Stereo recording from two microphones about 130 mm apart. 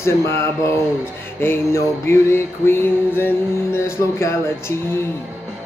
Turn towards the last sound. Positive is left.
turn(degrees=20)  # may be behind; listen again after turning